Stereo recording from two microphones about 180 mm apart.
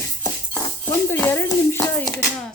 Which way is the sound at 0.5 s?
15° left (ahead or behind).